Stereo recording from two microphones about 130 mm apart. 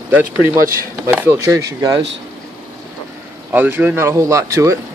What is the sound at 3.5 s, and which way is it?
Speech, 15° right (ahead or behind).